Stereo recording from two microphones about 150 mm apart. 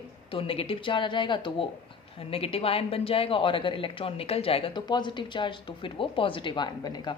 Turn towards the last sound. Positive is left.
turn(degrees=30)  # may be behind; listen again after turning